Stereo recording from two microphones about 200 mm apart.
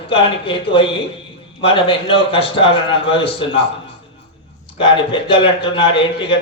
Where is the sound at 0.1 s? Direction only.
25° left (ahead or behind).